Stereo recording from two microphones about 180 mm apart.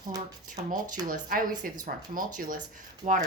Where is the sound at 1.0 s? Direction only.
50° right (ahead or behind).